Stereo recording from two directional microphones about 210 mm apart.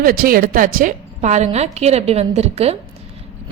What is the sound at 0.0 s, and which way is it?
A woman's voice, 45° right (ahead or behind).